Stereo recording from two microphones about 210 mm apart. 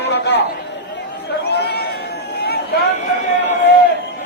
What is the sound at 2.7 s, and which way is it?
Speech, 50° left (ahead or behind).